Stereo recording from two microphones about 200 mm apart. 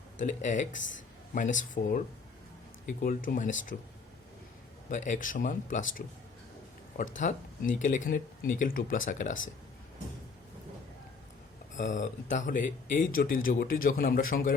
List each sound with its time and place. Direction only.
0.2 s speech: 40° left (ahead or behind)
0.8 s a man's voice: 65° left (ahead or behind)
1.3 s speech: 40° left (ahead or behind)
3.0 s a man's voice: 45° left (ahead or behind)
4.9 s speech: 40° left (ahead or behind)
7.2 s speech: 40° left (ahead or behind)
11.8 s a man's voice: 40° left (ahead or behind)